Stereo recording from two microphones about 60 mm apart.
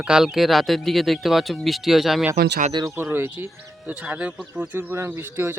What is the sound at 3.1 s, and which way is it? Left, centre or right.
Speech, right.